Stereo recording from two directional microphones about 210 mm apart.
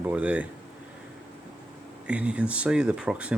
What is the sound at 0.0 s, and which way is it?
Speech, 5° right (ahead or behind).